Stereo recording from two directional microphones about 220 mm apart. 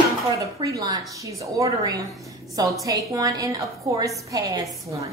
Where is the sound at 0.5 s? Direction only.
15° right (ahead or behind).